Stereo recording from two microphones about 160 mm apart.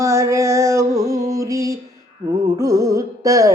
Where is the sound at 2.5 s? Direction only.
20° right (ahead or behind).